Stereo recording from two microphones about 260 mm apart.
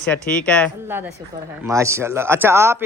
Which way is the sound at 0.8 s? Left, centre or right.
Centre.